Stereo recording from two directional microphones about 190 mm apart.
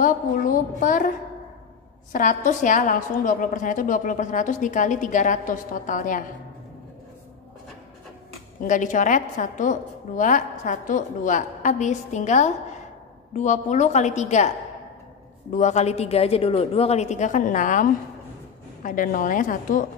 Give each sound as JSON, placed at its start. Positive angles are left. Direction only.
{"t": 0.7, "sound": "a woman's voice", "side_deg": 45}
{"t": 2.1, "sound": "a woman's voice", "side_deg": 40}
{"t": 8.6, "sound": "a woman's voice", "side_deg": 40}
{"t": 15.5, "sound": "a woman's voice", "side_deg": 40}